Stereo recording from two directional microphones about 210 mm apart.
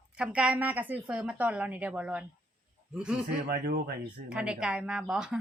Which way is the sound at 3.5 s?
45° right (ahead or behind).